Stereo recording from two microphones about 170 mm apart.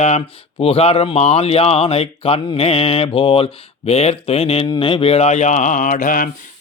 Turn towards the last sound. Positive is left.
turn(degrees=55)  # may be behind; listen again after turning